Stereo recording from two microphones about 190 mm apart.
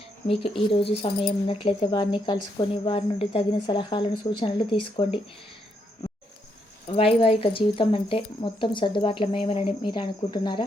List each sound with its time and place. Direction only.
0.3 s speech: 30° left (ahead or behind)
6.8 s speech: 30° left (ahead or behind)